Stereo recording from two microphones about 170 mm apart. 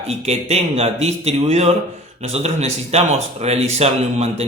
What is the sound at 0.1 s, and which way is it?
Speech, 35° right (ahead or behind).